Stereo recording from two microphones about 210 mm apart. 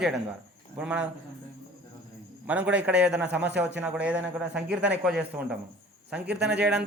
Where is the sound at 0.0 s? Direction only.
Centre (ahead or behind).